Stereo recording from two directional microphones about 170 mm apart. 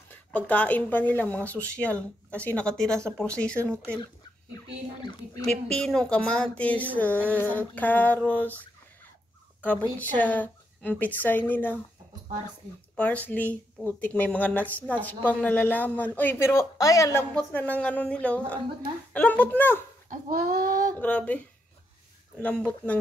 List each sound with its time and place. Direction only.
0.5 s a woman's voice: 10° left (ahead or behind)
5.0 s speech: 20° left (ahead or behind)
5.5 s a woman's voice: 5° left (ahead or behind)
9.6 s a woman's voice: 10° left (ahead or behind)
12.9 s a woman's voice: 10° left (ahead or behind)
17.3 s a woman's voice: 5° left (ahead or behind)
20.1 s a sound: 55° right (ahead or behind)
21.0 s a woman's voice: 10° left (ahead or behind)